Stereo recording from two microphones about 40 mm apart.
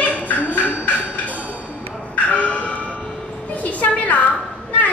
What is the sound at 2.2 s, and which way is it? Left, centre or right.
Music, left.